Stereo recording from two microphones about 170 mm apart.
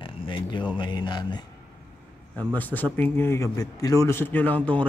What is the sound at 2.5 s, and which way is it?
A man's voice, 10° left (ahead or behind).